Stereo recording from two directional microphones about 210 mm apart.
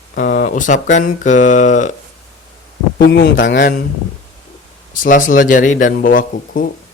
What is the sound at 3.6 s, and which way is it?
Speech, 45° left (ahead or behind).